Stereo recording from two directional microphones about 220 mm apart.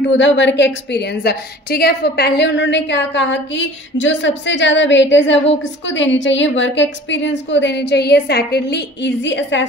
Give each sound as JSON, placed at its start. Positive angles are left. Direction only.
{"t": 0.0, "sound": "a woman's voice", "side_deg": 55}